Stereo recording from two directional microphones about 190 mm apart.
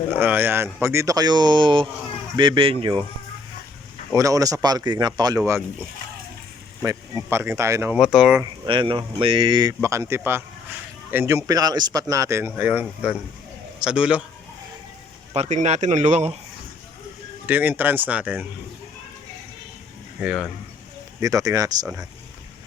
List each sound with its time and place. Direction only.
0.1 s speech: 10° right (ahead or behind); by 3.1 s 30° right (ahead or behind)
4.1 s speech: 15° right (ahead or behind)
6.8 s speech: 15° right (ahead or behind)
7.9 s speech: centre (ahead or behind)
8.6 s a man's voice: 25° right (ahead or behind); by 14.3 s 5° right (ahead or behind)
15.3 s a man's voice: 35° right (ahead or behind)
17.4 s speech: 10° right (ahead or behind)
20.1 s speech: 5° right (ahead or behind)
21.2 s speech: 15° right (ahead or behind)